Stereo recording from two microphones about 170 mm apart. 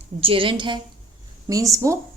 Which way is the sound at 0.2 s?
30° right (ahead or behind).